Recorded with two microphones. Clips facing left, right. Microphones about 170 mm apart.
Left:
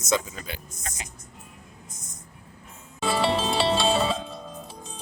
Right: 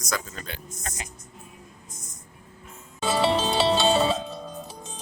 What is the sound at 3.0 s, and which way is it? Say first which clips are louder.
Music: right 1 dB; centre (ahead or behind).